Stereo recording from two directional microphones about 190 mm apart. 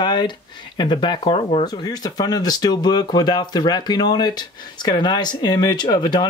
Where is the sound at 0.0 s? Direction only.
25° left (ahead or behind).